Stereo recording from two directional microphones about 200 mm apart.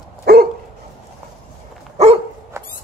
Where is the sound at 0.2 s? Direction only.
50° right (ahead or behind).